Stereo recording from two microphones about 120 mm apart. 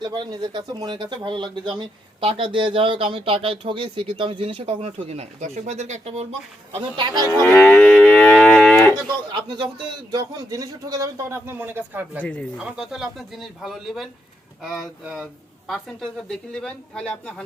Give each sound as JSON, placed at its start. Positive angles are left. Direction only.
{"t": 0.0, "sound": "speech", "side_deg": -40}
{"t": 6.9, "sound": "speech", "side_deg": -40}
{"t": 7.3, "sound": "moo", "side_deg": 20}
{"t": 9.3, "sound": "a man's voice", "side_deg": -40}
{"t": 12.2, "sound": "speech", "side_deg": 10}
{"t": 12.5, "sound": "speech", "side_deg": -10}